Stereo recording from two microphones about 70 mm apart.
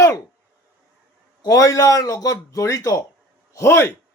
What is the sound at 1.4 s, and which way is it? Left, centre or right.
Speech, left.